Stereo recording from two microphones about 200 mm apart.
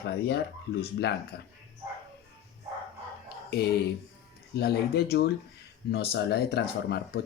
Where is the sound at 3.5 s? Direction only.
55° left (ahead or behind).